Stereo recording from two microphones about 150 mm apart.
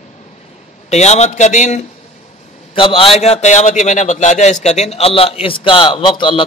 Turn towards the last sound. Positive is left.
turn(degrees=35)  # may be behind; listen again after turning